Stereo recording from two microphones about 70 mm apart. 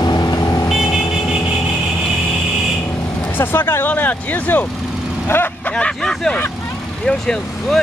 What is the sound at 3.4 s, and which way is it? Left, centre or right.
Speech, left.